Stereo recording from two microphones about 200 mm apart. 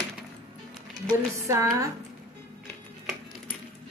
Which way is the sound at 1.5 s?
15° right (ahead or behind).